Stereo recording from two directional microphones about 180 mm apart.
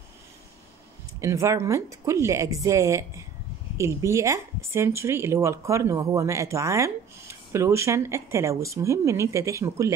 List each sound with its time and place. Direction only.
1.2 s speech: 15° right (ahead or behind)